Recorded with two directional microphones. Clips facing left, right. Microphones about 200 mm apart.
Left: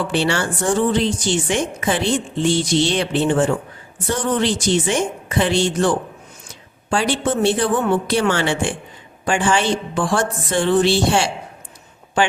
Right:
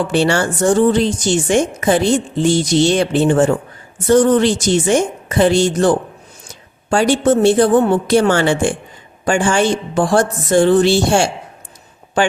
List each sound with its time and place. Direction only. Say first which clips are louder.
0.1 s a woman's voice: right 5 dB; 45° right (ahead or behind)